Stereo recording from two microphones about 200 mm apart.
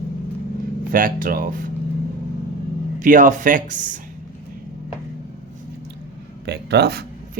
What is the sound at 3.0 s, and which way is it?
Speech, 40° right (ahead or behind).